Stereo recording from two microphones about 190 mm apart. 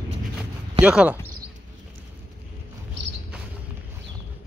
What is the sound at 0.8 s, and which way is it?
Speech, 5° right (ahead or behind).